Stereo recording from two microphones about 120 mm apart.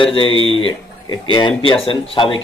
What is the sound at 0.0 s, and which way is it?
A man's voice, 50° left (ahead or behind).